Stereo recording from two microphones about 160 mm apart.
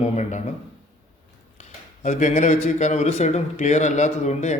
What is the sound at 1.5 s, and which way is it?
Speech, 45° left (ahead or behind).